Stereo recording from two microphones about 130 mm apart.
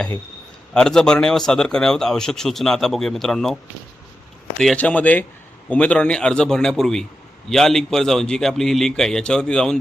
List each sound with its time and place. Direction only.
0.7 s a man's voice: 5° left (ahead or behind)
4.6 s a man's voice: 5° left (ahead or behind)